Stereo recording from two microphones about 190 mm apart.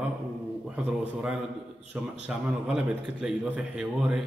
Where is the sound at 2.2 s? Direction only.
5° right (ahead or behind).